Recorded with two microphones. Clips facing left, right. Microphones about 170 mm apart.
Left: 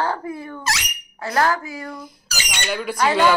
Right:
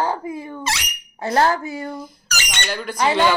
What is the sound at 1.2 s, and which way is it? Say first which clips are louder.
Speech: right 2 dB; 25° right (ahead or behind).